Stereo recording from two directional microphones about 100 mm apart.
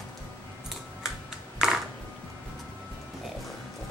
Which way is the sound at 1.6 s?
5° right (ahead or behind).